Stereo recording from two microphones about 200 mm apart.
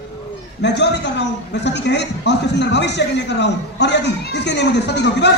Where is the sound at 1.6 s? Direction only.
60° left (ahead or behind).